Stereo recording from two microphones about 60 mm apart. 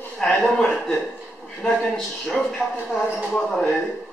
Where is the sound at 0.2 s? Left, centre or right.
Centre.